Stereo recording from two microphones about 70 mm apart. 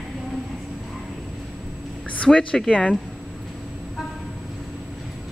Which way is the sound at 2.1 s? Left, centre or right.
Centre.